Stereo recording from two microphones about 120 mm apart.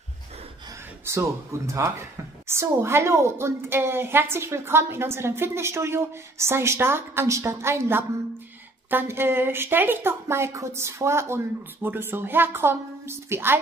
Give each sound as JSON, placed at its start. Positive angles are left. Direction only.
{"t": 1.0, "sound": "a woman's voice", "side_deg": -25}